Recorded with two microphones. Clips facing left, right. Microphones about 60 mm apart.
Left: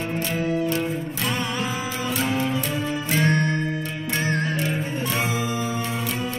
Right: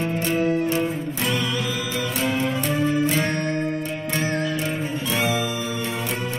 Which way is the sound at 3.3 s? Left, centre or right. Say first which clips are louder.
Left 1 dB; left.